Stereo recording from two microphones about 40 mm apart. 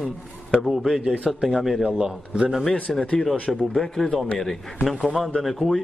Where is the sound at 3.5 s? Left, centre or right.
Centre.